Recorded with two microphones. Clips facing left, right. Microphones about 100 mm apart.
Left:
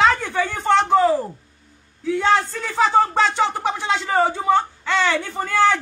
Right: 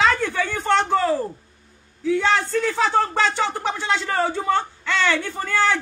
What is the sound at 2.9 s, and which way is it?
Speech, 10° left (ahead or behind).